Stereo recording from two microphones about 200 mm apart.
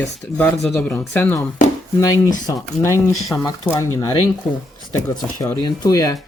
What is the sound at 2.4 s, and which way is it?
Speech, 15° left (ahead or behind).